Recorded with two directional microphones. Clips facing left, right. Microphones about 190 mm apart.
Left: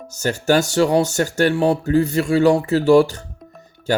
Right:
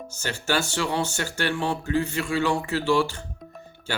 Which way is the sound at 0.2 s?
40° left (ahead or behind).